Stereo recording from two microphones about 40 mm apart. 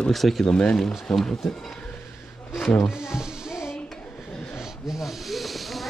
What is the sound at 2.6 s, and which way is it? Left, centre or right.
Speech, centre.